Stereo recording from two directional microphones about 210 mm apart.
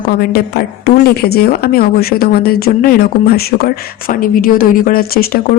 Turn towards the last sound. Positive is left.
turn(degrees=45)  # may be behind; listen again after turning